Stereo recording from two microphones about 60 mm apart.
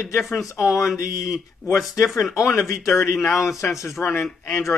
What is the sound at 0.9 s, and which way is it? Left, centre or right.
Speech, left.